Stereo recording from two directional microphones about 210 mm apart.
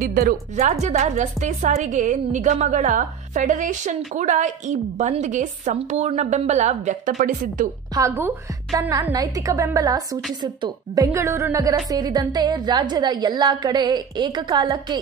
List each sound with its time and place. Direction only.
0.0 s a woman's voice: 40° right (ahead or behind)
7.9 s a woman's voice: 15° right (ahead or behind)